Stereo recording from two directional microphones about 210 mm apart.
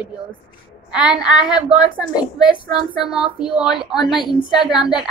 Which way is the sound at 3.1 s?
5° right (ahead or behind).